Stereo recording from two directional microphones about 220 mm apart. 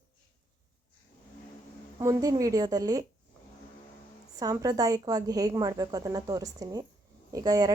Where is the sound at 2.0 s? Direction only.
15° right (ahead or behind).